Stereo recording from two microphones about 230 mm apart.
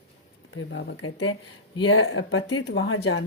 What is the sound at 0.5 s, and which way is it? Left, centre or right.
Speech, left.